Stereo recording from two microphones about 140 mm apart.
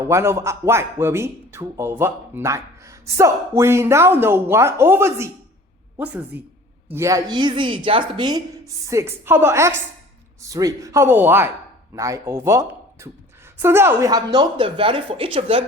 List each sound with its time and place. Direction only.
0.0 s a man's voice: 20° right (ahead or behind); by 15.6 s 40° right (ahead or behind)